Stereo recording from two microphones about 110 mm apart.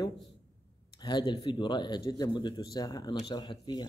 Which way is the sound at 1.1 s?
40° left (ahead or behind).